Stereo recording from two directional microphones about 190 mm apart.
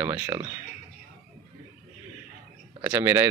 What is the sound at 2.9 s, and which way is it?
Speech, 15° right (ahead or behind).